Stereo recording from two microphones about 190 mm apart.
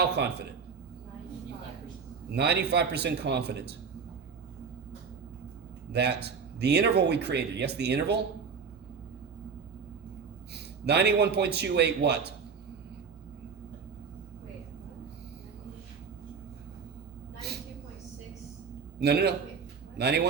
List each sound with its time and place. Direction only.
2.3 s speech: 60° right (ahead or behind)
5.9 s speech: 60° right (ahead or behind)
10.5 s speech: 60° right (ahead or behind)
18.9 s speech: 60° right (ahead or behind)